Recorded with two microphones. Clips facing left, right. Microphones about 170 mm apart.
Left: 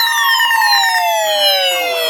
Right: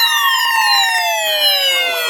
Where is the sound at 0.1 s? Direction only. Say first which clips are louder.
Left 1 dB; 35° left (ahead or behind).